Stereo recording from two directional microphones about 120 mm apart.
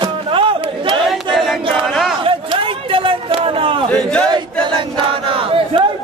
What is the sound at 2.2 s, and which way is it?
Chatter, 45° right (ahead or behind).